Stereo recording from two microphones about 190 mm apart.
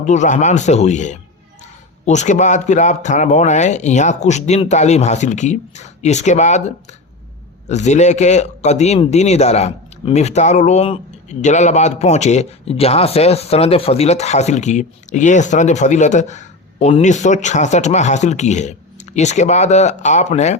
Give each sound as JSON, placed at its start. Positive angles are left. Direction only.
{"t": 0.0, "sound": "speech", "side_deg": 40}